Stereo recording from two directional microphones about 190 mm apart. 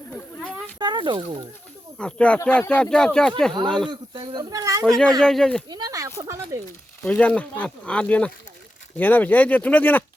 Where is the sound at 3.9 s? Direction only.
25° right (ahead or behind).